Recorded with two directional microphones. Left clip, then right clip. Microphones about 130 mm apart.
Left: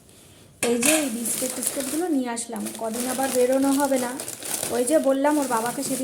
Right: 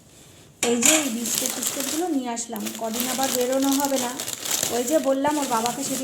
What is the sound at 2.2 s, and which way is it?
Speech, 40° left (ahead or behind).